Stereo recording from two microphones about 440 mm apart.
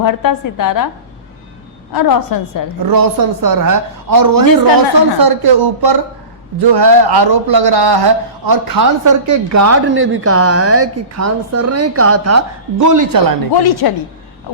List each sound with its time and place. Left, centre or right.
0.0 s a woman's voice: left
1.9 s a woman's voice: left
2.8 s a man's voice: right
12.8 s speech: right
13.5 s a woman's voice: left